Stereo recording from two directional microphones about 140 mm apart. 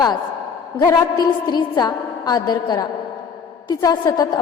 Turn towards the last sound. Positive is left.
turn(degrees=25)  # may be behind; listen again after turning